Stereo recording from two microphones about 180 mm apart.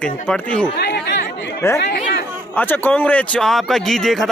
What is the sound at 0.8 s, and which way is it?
Chatter, 70° left (ahead or behind).